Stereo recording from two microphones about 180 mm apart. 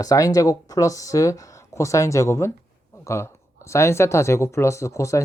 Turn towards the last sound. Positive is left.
turn(degrees=15)  # may be behind; listen again after turning